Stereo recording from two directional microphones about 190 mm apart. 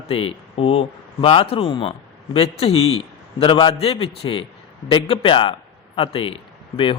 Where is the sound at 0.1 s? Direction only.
30° left (ahead or behind).